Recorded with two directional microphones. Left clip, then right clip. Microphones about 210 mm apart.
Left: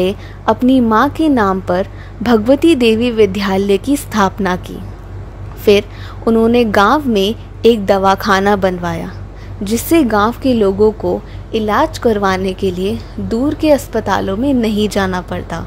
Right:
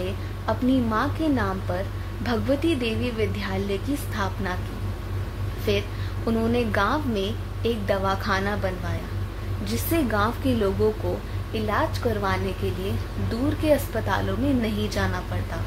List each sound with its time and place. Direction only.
0.0 s a woman's voice: 50° left (ahead or behind)
5.7 s a woman's voice: 45° left (ahead or behind)
11.5 s a woman's voice: 50° left (ahead or behind)